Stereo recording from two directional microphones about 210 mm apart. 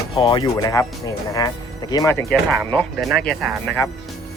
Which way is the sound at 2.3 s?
Centre (ahead or behind).